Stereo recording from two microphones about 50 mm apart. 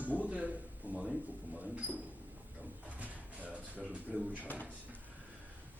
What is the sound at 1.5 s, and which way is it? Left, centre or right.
Speech, right.